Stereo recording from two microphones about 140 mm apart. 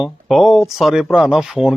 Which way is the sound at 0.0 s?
Centre (ahead or behind).